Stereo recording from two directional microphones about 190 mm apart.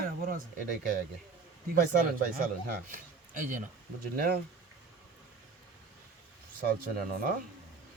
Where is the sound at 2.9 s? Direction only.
40° right (ahead or behind).